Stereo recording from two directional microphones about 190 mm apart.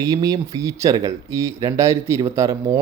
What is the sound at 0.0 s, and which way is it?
Speech, 20° right (ahead or behind).